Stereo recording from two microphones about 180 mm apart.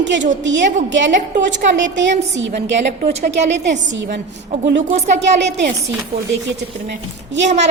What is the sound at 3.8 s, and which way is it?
Speech, 90° right.